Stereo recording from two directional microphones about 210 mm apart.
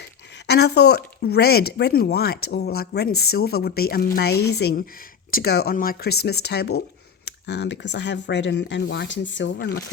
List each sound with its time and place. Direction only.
0.4 s speech: 50° left (ahead or behind)